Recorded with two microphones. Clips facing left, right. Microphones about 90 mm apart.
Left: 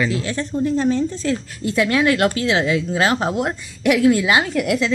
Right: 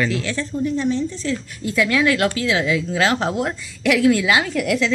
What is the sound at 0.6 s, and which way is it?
Speech, 40° left (ahead or behind).